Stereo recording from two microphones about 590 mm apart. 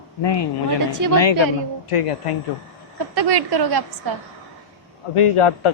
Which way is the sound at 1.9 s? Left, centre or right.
Left.